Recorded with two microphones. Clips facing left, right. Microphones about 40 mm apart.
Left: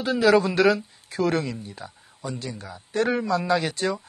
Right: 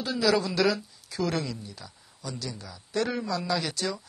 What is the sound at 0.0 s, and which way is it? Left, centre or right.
Speech, left.